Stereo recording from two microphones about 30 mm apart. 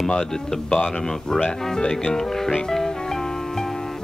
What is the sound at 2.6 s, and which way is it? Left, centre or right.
Music, centre.